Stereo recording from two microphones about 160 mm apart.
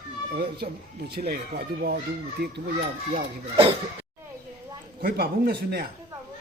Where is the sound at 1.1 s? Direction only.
80° right.